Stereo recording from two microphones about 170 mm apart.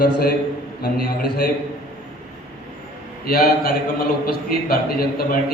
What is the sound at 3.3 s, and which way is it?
A man's voice, 60° left (ahead or behind).